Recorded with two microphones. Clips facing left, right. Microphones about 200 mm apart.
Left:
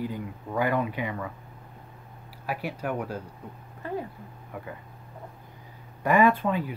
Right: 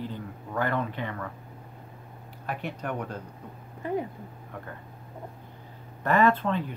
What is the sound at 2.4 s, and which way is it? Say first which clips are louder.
Speech: left 2 dB; 5° left (ahead or behind).